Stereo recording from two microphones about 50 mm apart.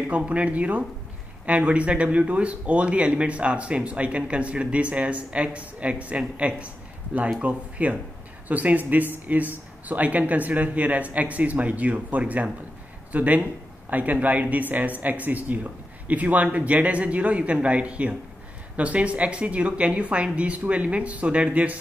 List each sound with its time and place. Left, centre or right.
0.1 s speech: right